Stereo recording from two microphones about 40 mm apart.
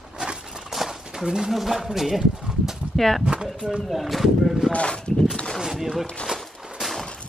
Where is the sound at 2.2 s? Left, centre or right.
Centre.